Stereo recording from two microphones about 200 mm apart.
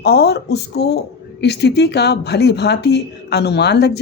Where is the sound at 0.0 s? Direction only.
55° left (ahead or behind).